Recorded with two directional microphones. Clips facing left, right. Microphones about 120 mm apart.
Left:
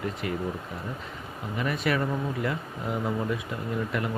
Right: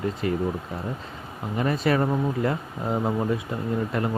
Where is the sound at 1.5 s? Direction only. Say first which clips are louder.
Right 5 dB; 35° right (ahead or behind).